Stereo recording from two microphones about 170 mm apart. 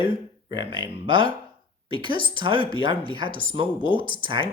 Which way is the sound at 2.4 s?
30° right (ahead or behind).